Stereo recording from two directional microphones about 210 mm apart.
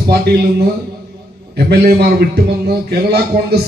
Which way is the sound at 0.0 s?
50° right (ahead or behind).